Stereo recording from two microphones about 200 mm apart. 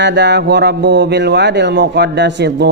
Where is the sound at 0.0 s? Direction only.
60° right (ahead or behind).